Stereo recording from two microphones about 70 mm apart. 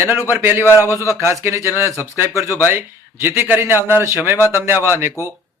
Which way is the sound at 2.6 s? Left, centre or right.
Right.